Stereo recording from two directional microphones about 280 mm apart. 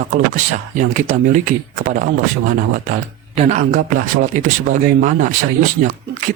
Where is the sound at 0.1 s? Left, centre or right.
Right.